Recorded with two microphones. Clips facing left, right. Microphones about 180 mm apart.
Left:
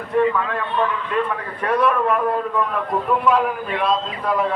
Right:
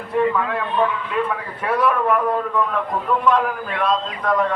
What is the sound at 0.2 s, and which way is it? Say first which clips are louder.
A man's voice: even; 10° right (ahead or behind).